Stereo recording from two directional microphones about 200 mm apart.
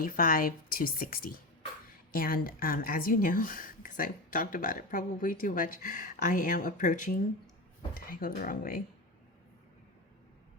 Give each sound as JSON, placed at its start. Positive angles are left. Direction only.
{"t": 0.0, "sound": "a woman's voice", "side_deg": 45}